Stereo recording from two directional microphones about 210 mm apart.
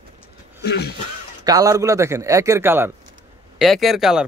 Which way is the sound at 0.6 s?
50° left (ahead or behind).